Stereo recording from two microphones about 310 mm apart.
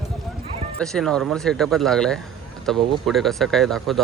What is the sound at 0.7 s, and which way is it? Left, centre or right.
Speech, centre.